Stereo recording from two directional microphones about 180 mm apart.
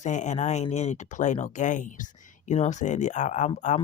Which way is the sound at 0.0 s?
40° left (ahead or behind).